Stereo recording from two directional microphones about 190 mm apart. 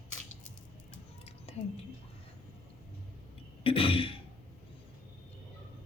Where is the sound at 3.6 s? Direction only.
30° left (ahead or behind).